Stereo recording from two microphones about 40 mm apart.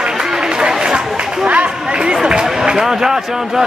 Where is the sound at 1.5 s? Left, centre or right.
Right.